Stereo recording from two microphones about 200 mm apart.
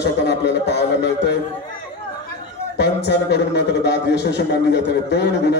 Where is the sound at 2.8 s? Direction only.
60° left (ahead or behind).